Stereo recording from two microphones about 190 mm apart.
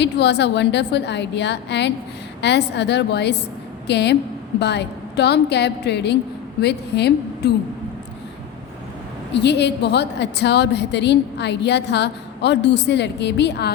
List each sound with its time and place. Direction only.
0.0 s a woman's voice: 65° left (ahead or behind)
9.3 s a woman's voice: 65° left (ahead or behind)